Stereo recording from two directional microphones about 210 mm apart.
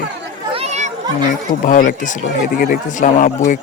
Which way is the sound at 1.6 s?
40° left (ahead or behind).